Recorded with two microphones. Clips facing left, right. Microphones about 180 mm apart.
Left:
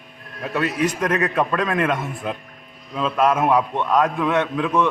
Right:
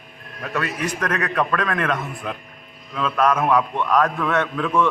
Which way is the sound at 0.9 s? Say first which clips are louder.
Left 2 dB; 25° left (ahead or behind).